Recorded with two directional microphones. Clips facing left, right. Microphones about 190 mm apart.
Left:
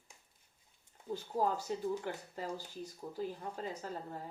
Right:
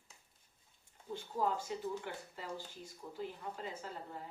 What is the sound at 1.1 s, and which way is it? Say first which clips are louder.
Speech: left 2 dB; 40° left (ahead or behind).